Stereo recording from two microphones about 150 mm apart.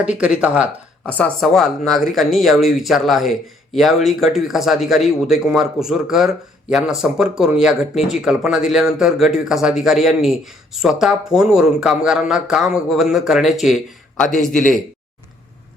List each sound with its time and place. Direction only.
0.0 s speech: 5° right (ahead or behind)
1.0 s speech: 10° left (ahead or behind)
14.5 s speech: 60° left (ahead or behind)